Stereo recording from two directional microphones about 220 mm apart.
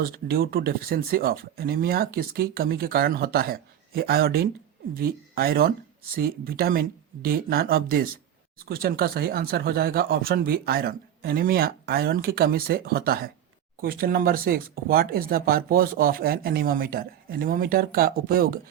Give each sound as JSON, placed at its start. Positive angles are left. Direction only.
{"t": 0.0, "sound": "speech", "side_deg": -45}